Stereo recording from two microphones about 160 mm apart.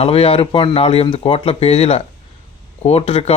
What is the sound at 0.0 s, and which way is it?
Speech, 35° left (ahead or behind).